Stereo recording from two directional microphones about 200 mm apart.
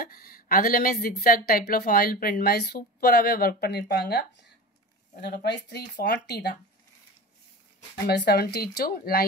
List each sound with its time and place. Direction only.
0.0 s speech: 45° left (ahead or behind)
7.9 s speech: 55° left (ahead or behind)